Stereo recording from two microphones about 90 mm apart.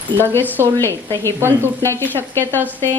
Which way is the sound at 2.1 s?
25° left (ahead or behind).